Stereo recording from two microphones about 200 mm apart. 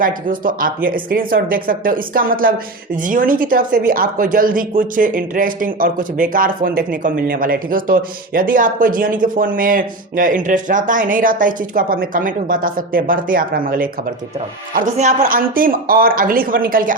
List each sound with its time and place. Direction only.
0.0 s speech: 45° right (ahead or behind)